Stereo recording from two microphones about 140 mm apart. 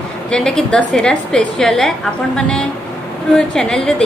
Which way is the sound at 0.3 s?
5° left (ahead or behind).